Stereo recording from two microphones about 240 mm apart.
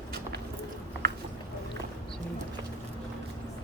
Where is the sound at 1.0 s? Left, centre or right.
Right.